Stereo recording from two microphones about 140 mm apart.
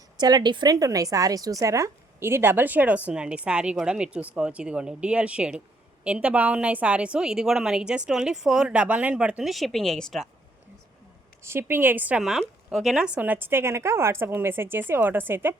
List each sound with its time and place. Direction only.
0.2 s a woman's voice: 30° right (ahead or behind); by 10.2 s centre (ahead or behind)
11.4 s a woman's voice: 15° right (ahead or behind)